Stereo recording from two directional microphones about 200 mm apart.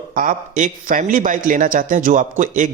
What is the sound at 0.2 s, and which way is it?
Speech, 40° right (ahead or behind).